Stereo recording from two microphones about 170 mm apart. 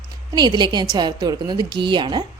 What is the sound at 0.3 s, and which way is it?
A woman's voice, 25° right (ahead or behind).